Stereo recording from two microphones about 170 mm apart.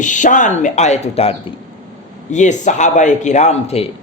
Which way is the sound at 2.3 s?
45° left (ahead or behind).